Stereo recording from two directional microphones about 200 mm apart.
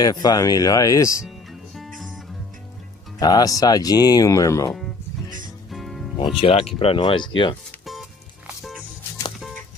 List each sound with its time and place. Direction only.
0.0 s speech: 20° left (ahead or behind)
1.2 s music: centre (ahead or behind)
3.2 s speech: 20° left (ahead or behind)
5.7 s music: centre (ahead or behind)
6.4 s speech: 30° left (ahead or behind)
7.8 s music: centre (ahead or behind)